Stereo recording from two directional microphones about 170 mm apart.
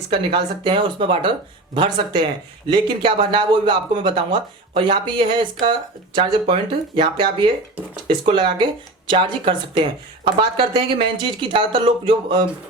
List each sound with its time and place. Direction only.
0.1 s speech: 30° right (ahead or behind)
8.3 s speech: 30° right (ahead or behind)